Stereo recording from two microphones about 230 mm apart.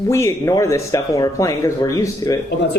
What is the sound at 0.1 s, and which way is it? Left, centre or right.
Speech, centre.